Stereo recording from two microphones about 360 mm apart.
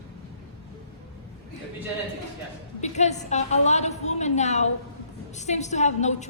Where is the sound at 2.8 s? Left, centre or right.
Centre.